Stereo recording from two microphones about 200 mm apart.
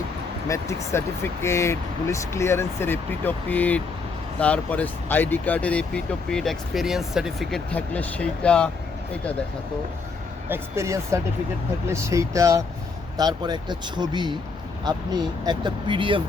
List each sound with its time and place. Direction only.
0.4 s speech: 15° left (ahead or behind)
10.5 s speech: 15° right (ahead or behind)